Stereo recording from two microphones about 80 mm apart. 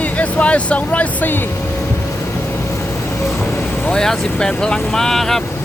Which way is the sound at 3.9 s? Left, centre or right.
Centre.